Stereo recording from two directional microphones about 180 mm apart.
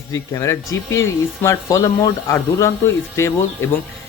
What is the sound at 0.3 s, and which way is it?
Speech, 15° left (ahead or behind).